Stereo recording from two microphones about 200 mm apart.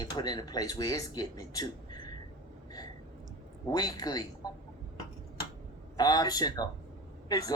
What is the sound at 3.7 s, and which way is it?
Speech, 20° left (ahead or behind).